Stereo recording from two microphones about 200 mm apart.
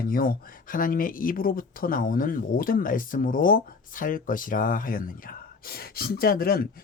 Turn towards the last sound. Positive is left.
turn(degrees=50)  # may be behind; listen again after turning